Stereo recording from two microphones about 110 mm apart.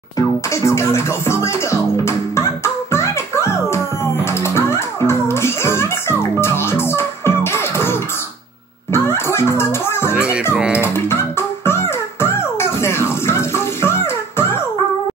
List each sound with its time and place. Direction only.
0.6 s music: 25° left (ahead or behind)
10.5 s music: 10° right (ahead or behind)
10.8 s music: 25° left (ahead or behind)